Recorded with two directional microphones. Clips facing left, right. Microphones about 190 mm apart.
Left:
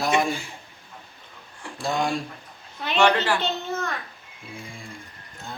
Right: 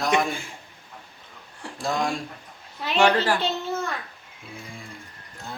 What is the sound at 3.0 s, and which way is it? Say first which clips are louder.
Speech: even; 35° right (ahead or behind).